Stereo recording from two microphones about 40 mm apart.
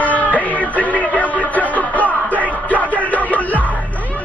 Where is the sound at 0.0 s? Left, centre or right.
Left.